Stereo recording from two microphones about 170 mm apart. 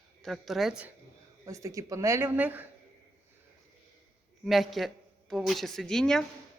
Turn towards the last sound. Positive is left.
turn(degrees=5)  # may be behind; listen again after turning